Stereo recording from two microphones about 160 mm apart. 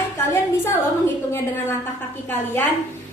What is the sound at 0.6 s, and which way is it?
Speech, 15° left (ahead or behind).